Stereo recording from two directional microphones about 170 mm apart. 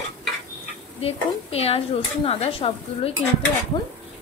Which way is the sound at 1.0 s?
35° left (ahead or behind).